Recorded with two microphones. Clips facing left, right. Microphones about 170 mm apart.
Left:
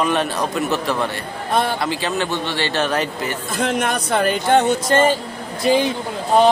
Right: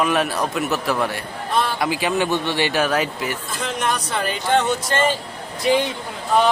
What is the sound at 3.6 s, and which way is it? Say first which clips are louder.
Speech: left 4 dB; 55° left (ahead or behind).